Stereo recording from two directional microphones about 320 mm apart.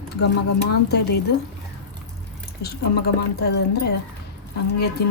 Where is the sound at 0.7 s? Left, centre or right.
Left.